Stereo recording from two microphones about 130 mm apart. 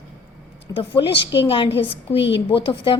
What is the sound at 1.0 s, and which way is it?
A woman's voice, 45° left (ahead or behind).